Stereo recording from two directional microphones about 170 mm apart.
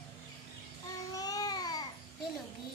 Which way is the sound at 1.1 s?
20° left (ahead or behind).